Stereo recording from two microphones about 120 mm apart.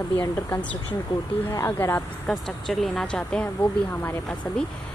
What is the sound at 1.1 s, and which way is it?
Speech, 45° left (ahead or behind).